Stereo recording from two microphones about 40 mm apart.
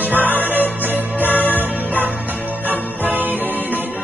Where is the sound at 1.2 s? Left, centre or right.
Left.